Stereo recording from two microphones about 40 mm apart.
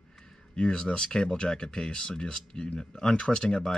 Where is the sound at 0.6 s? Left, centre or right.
Left.